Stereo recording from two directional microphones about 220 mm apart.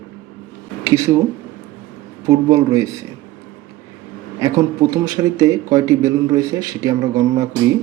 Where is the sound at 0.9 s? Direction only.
10° right (ahead or behind).